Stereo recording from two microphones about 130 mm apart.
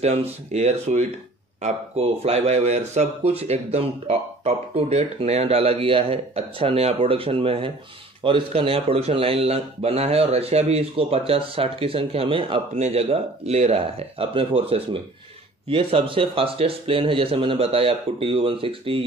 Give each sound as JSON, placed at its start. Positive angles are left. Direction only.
{"t": 0.0, "sound": "speech", "side_deg": -55}
{"t": 12.7, "sound": "speech", "side_deg": -55}